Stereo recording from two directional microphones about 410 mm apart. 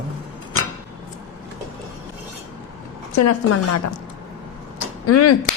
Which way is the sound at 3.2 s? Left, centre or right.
Left.